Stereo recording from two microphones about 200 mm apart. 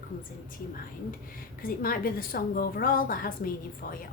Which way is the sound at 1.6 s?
45° left (ahead or behind).